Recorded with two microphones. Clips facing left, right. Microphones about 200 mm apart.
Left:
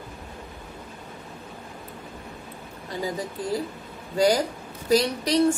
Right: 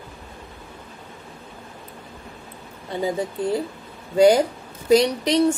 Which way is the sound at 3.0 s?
25° right (ahead or behind).